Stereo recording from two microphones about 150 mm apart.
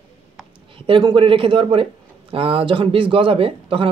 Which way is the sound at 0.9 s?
35° right (ahead or behind).